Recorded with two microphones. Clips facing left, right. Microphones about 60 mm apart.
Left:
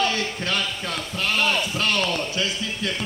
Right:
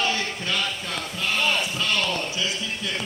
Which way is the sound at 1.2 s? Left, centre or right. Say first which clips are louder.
Left 2 dB; left.